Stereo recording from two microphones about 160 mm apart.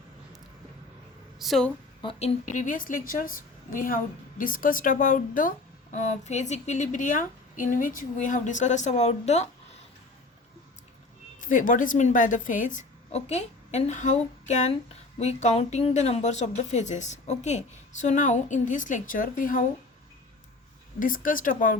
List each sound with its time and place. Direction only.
1.4 s a woman's voice: centre (ahead or behind)
2.0 s a woman's voice: 35° left (ahead or behind)
11.3 s a woman's voice: 55° left (ahead or behind)
21.0 s a woman's voice: 60° left (ahead or behind)